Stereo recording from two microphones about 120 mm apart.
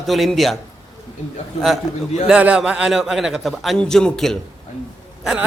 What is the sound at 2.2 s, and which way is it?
A man's voice, 10° right (ahead or behind).